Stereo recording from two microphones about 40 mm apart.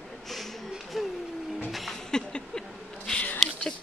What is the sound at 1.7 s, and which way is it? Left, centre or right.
Music, centre.